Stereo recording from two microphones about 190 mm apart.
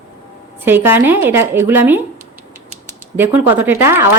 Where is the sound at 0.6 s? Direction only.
10° right (ahead or behind).